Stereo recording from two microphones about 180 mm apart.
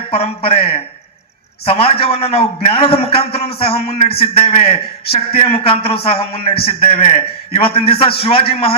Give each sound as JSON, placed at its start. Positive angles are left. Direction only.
{"t": 0.1, "sound": "a man's voice", "side_deg": 30}